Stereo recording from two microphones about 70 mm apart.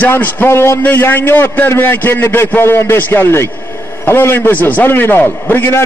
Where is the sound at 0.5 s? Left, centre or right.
Left.